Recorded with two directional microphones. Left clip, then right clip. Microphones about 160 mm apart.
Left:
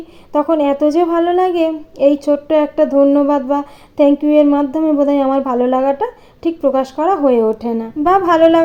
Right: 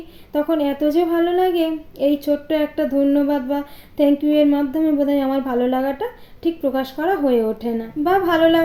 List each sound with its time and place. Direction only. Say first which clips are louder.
0.3 s speech: left 6 dB; 15° left (ahead or behind)